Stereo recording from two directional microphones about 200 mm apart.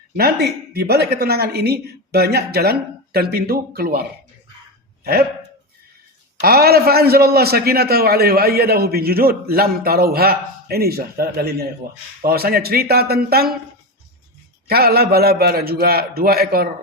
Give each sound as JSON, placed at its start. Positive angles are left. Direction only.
{"t": 0.2, "sound": "a man's voice", "side_deg": -55}
{"t": 6.4, "sound": "a man's voice", "side_deg": -50}
{"t": 14.7, "sound": "a man's voice", "side_deg": -50}